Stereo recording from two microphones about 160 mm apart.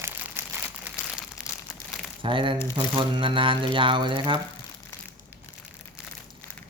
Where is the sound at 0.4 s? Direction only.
15° right (ahead or behind).